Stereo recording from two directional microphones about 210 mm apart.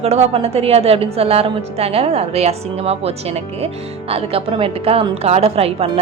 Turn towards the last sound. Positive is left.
turn(degrees=-30)  # may be behind; listen again after turning